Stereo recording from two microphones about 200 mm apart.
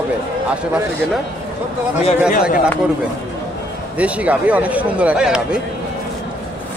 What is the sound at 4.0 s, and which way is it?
Speech, 5° right (ahead or behind).